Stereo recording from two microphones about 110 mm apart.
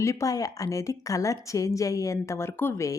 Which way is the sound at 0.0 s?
30° left (ahead or behind).